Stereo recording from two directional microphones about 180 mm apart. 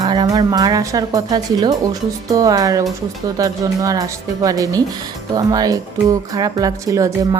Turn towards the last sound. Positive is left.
turn(degrees=-20)  # may be behind; listen again after turning